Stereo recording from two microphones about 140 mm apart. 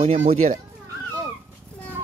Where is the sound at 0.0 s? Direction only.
50° right (ahead or behind).